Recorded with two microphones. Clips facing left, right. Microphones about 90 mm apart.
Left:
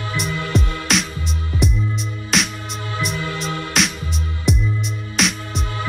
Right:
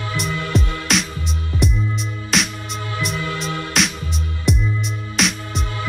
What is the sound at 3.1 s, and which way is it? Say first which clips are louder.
Music: right 1 dB; 30° left (ahead or behind).